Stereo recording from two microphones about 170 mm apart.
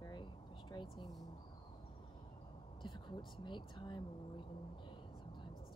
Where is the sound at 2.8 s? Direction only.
25° left (ahead or behind).